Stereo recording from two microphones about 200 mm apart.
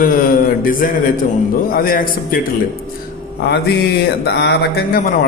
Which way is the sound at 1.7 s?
45° left (ahead or behind).